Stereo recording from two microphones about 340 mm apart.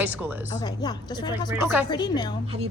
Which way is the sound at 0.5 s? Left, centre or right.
Centre.